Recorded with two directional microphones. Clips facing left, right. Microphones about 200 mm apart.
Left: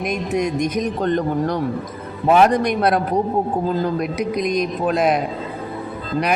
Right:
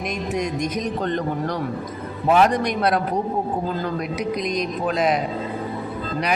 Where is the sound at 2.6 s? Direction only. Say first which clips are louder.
Left 3 dB; 50° left (ahead or behind).